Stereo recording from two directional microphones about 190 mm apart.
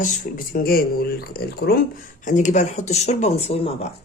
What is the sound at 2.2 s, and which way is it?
Speech, 40° left (ahead or behind).